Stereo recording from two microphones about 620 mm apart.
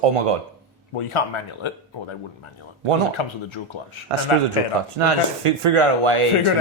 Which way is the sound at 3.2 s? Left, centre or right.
Left.